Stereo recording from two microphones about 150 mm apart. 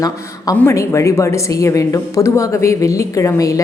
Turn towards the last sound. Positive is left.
turn(degrees=20)  # may be behind; listen again after turning